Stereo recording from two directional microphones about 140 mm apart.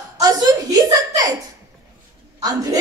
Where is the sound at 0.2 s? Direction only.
25° right (ahead or behind).